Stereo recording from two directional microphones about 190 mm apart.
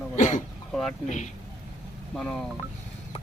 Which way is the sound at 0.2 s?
40° left (ahead or behind).